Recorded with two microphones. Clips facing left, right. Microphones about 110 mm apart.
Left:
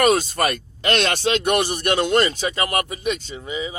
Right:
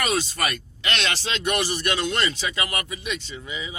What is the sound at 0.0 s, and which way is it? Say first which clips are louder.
Speech: left 7 dB; 45° left (ahead or behind).